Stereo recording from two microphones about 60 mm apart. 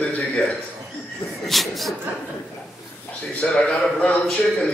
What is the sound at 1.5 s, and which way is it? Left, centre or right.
Speech, centre.